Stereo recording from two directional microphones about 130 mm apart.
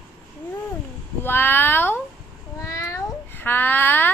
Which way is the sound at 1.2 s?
15° left (ahead or behind).